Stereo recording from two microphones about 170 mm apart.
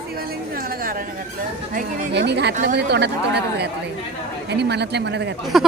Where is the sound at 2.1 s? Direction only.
85° right.